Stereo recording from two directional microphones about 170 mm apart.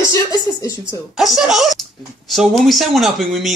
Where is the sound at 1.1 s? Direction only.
Centre (ahead or behind).